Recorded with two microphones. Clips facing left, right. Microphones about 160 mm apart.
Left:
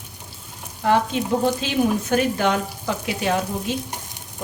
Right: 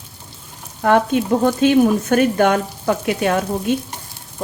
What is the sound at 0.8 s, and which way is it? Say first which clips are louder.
Speech: right 4 dB; 55° right (ahead or behind).